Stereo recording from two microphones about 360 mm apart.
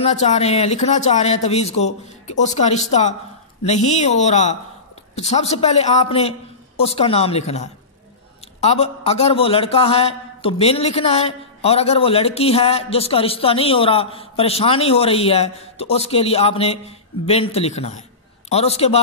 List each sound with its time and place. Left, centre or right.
0.0 s a man's voice: centre